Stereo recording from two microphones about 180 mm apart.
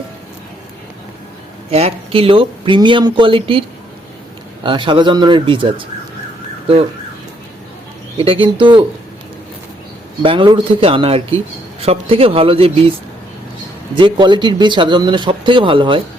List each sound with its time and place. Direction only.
1.7 s speech: 35° right (ahead or behind)
4.6 s speech: 25° right (ahead or behind)
8.2 s speech: 30° right (ahead or behind)
10.2 s speech: 25° right (ahead or behind)
13.9 s speech: 25° right (ahead or behind)